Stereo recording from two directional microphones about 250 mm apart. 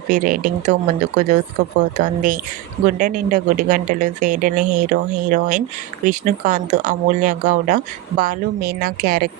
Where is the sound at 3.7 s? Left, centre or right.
Right.